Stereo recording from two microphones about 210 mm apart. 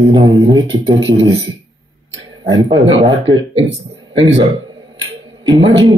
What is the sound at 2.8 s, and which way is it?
Speech, 30° right (ahead or behind).